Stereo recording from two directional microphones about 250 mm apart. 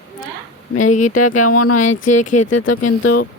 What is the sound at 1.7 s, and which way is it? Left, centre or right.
Speech, left.